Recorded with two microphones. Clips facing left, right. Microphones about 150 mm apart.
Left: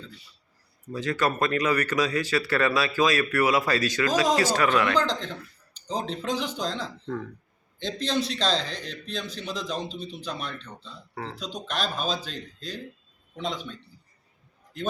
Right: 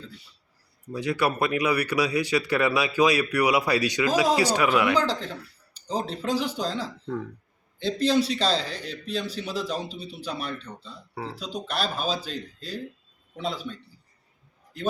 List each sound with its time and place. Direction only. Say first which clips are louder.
0.9 s a man's voice: right 1 dB; 15° right (ahead or behind)